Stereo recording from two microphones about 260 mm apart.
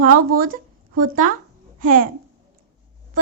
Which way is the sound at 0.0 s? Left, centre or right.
Right.